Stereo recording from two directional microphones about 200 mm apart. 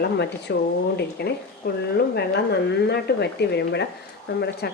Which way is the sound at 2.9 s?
55° left (ahead or behind).